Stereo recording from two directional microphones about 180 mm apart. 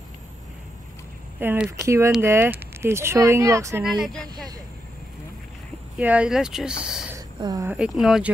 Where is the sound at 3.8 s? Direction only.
Centre (ahead or behind).